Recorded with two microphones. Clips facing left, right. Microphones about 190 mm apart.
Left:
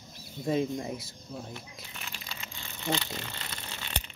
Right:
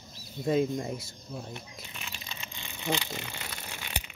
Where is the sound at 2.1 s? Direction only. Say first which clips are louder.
Even; 20° right (ahead or behind).